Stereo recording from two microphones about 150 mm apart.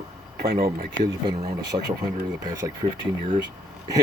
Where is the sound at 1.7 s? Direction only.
30° right (ahead or behind).